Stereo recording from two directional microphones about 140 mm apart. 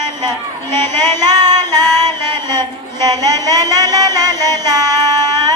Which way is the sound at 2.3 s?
30° right (ahead or behind).